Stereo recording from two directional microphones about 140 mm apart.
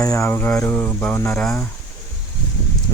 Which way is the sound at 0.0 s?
20° left (ahead or behind).